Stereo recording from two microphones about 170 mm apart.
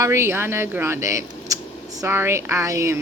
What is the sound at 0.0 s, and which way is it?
A woman's voice, 15° right (ahead or behind).